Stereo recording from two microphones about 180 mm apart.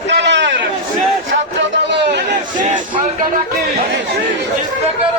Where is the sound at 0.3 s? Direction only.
80° right.